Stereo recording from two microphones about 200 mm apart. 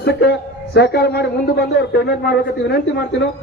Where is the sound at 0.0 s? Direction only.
60° left (ahead or behind).